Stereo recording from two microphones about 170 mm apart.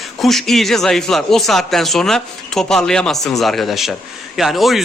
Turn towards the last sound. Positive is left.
turn(degrees=0)  # may be behind; listen again after turning